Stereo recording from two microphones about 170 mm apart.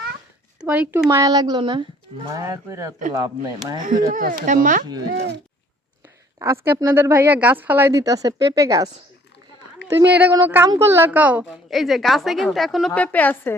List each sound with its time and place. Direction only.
0.6 s speech: 10° right (ahead or behind); by 2.3 s 30° right (ahead or behind)
2.3 s speech: 20° right (ahead or behind)
3.8 s speech: 50° right (ahead or behind)
6.4 s speech: 15° right (ahead or behind)
9.9 s a woman's voice: 10° right (ahead or behind); by 13.6 s 10° left (ahead or behind)